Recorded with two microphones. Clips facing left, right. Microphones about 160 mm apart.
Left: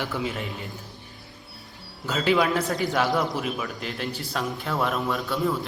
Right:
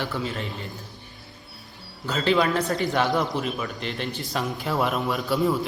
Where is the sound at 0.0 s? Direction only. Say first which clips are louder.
Even; 15° left (ahead or behind).